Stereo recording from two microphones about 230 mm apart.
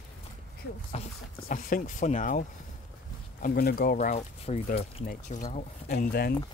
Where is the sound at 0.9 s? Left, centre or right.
Left.